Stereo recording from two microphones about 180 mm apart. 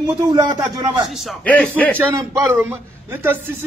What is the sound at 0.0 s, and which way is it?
Speech, 20° right (ahead or behind).